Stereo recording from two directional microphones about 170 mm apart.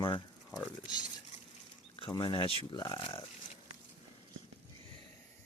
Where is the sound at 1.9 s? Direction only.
30° left (ahead or behind).